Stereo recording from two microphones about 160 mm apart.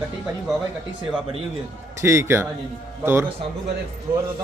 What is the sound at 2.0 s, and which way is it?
Speech, 15° right (ahead or behind).